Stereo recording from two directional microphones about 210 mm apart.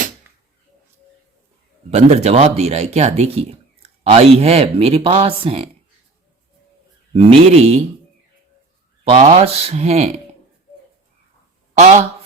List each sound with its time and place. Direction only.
1.9 s speech: 30° right (ahead or behind)
7.2 s speech: 25° right (ahead or behind)
9.0 s speech: 30° right (ahead or behind)
11.8 s speech: 35° right (ahead or behind)